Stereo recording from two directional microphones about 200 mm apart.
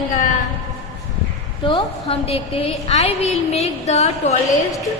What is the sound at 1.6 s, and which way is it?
A woman's voice, 25° left (ahead or behind).